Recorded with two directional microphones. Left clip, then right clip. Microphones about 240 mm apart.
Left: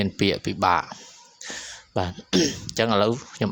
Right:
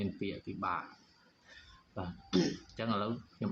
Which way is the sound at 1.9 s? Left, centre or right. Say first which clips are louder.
Left 12 dB; left.